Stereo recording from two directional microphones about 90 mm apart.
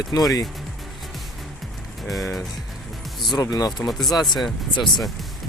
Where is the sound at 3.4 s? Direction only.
40° left (ahead or behind).